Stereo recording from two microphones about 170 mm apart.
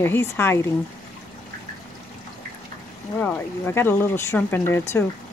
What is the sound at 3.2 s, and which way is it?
Speech, 10° left (ahead or behind).